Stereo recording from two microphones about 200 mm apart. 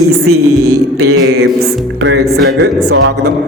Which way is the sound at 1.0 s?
90° right.